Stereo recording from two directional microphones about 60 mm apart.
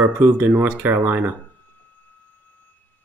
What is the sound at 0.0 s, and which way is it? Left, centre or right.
Speech, right.